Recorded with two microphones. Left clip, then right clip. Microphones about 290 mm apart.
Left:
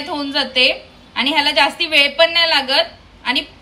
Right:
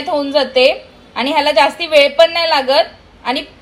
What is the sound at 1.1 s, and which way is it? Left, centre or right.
Speech, left.